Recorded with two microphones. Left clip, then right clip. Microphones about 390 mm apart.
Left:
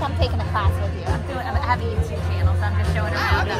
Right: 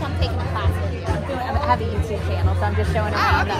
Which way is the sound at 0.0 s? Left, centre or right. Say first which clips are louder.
Left 2 dB; centre.